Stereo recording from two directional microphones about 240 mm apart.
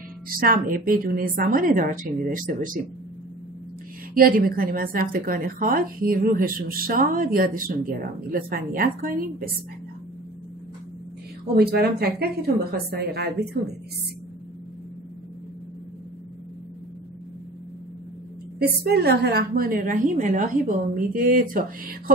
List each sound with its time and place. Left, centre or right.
0.3 s a woman's voice: right
4.1 s a woman's voice: right
11.5 s a woman's voice: right
18.9 s a woman's voice: right